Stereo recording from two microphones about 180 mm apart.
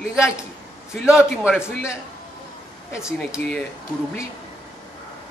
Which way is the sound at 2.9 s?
15° left (ahead or behind).